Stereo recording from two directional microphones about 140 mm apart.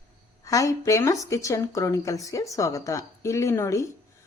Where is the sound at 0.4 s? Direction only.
25° left (ahead or behind).